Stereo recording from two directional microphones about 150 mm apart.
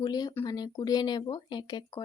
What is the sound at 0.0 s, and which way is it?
Speech, 25° left (ahead or behind).